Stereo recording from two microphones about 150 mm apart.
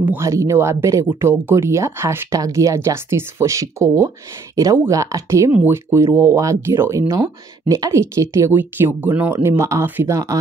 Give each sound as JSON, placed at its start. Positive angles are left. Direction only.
{"t": 0.0, "sound": "speech", "side_deg": -15}